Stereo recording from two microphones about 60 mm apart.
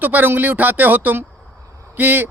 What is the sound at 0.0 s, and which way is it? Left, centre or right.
A man's voice, right.